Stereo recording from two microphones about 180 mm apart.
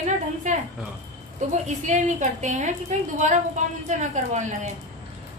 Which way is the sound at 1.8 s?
40° right (ahead or behind).